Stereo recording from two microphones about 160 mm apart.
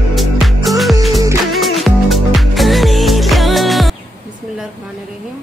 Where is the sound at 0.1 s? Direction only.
Centre (ahead or behind).